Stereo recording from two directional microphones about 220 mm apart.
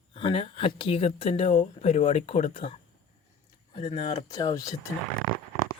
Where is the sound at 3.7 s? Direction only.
25° left (ahead or behind).